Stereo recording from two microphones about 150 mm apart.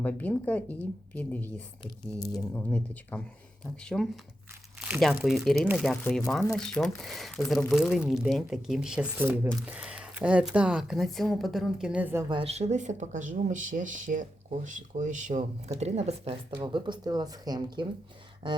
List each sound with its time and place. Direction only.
0.0 s speech: 10° left (ahead or behind)
2.1 s speech: 25° left (ahead or behind)
2.4 s speech: 10° left (ahead or behind); by 12.2 s 10° right (ahead or behind)
12.3 s speech: 40° right (ahead or behind)